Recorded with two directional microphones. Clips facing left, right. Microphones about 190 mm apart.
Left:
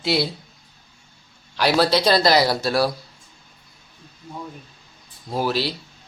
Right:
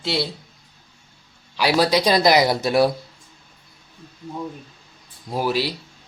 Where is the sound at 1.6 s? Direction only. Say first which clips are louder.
Even; 10° right (ahead or behind).